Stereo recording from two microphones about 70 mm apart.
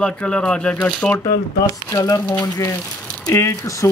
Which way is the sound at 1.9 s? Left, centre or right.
Left.